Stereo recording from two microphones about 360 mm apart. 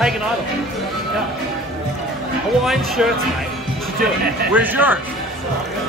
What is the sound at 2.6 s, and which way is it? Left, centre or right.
Speech, centre.